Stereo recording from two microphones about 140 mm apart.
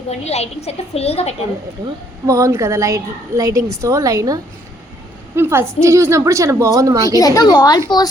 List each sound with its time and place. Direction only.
0.1 s a woman's voice: 50° left (ahead or behind)
2.2 s a woman's voice: 25° right (ahead or behind)
5.4 s a woman's voice: 20° right (ahead or behind)
7.2 s a woman's voice: 25° left (ahead or behind)